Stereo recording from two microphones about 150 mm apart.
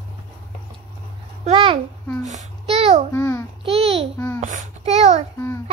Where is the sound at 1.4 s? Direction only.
35° right (ahead or behind).